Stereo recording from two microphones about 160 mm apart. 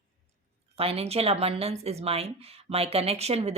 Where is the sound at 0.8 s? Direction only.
40° right (ahead or behind).